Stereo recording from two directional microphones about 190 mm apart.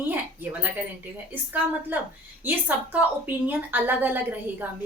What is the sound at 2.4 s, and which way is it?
A woman's voice, 10° right (ahead or behind).